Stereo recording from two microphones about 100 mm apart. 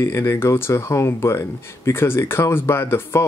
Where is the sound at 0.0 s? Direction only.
25° left (ahead or behind).